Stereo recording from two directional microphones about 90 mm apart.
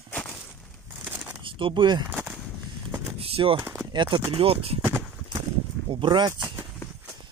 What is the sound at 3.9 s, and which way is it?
Speech, 60° right (ahead or behind).